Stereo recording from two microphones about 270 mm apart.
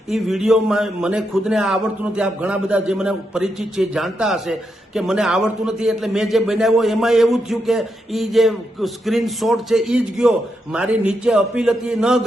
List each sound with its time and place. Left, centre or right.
0.1 s a man's voice: centre